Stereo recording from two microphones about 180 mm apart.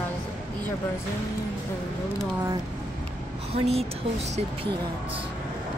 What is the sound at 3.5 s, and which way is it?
Speech, 35° right (ahead or behind).